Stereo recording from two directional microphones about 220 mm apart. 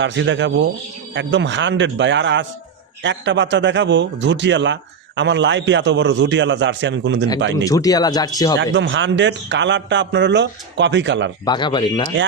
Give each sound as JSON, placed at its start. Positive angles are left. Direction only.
{"t": 0.0, "sound": "a man's voice", "side_deg": -55}
{"t": 7.5, "sound": "speech", "side_deg": 15}
{"t": 8.5, "sound": "a man's voice", "side_deg": -55}
{"t": 11.4, "sound": "speech", "side_deg": 20}